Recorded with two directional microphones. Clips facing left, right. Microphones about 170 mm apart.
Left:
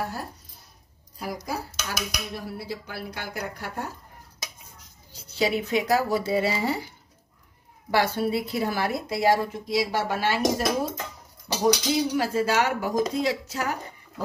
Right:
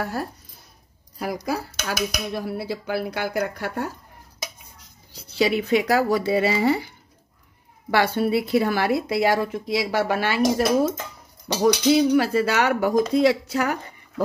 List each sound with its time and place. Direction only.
1.2 s a woman's voice: 70° right (ahead or behind)
5.3 s a woman's voice: 70° right (ahead or behind)
7.9 s a woman's voice: 65° right (ahead or behind)